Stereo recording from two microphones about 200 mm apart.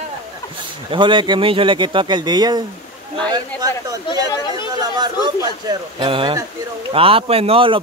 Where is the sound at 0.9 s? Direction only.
25° right (ahead or behind).